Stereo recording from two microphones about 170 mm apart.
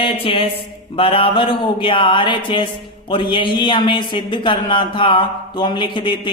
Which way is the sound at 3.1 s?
30° left (ahead or behind).